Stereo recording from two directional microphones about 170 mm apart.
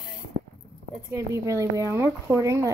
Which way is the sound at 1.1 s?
15° right (ahead or behind).